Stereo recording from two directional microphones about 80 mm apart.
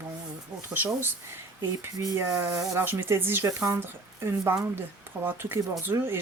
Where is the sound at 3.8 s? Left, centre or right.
Right.